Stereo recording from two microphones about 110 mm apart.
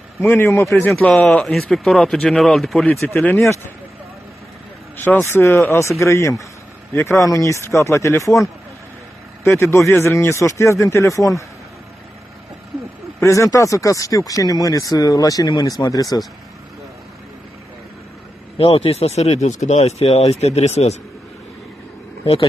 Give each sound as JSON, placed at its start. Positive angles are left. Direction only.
{"t": 0.2, "sound": "speech", "side_deg": 25}
{"t": 0.8, "sound": "speech", "side_deg": 10}
{"t": 4.9, "sound": "speech", "side_deg": 20}
{"t": 9.6, "sound": "speech", "side_deg": 25}
{"t": 13.2, "sound": "speech", "side_deg": 30}
{"t": 18.6, "sound": "speech", "side_deg": 55}
{"t": 22.2, "sound": "speech", "side_deg": 60}